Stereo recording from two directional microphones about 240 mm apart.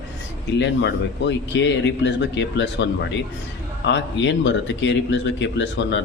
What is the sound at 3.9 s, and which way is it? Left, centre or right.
A man's voice, left.